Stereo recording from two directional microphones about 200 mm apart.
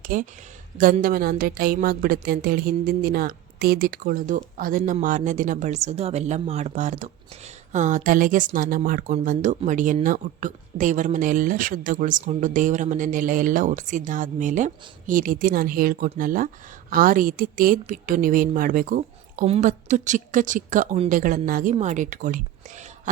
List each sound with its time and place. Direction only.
0.0 s a woman's voice: 45° right (ahead or behind)